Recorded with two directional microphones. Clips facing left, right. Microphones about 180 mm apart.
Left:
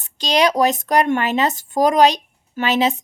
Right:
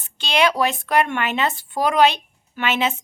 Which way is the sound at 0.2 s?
40° left (ahead or behind).